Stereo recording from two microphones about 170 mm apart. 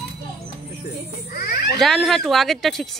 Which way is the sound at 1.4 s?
65° left (ahead or behind).